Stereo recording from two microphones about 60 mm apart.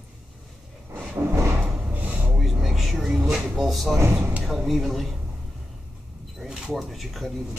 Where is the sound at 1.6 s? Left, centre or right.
Right.